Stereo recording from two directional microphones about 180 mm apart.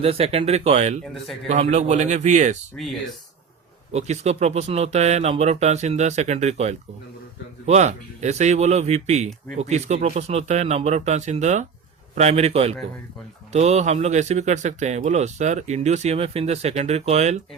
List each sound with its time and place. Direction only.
0.0 s speech: 35° right (ahead or behind)
3.9 s speech: 40° right (ahead or behind)